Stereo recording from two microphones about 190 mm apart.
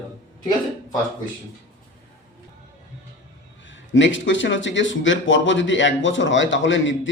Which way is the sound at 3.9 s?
75° left (ahead or behind).